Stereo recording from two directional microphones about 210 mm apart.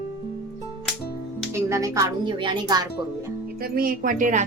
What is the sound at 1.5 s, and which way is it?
A woman's voice, 15° right (ahead or behind).